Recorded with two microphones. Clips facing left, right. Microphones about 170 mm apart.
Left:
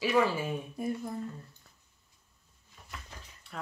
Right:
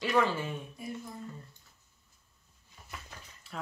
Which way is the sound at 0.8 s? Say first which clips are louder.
Left 11 dB; 50° left (ahead or behind).